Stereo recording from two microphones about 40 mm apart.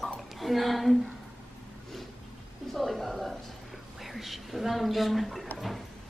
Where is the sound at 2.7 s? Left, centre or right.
Centre.